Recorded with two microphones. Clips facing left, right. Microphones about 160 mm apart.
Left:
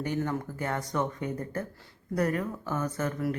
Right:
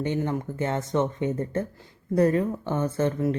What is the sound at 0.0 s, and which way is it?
Speech, 20° right (ahead or behind).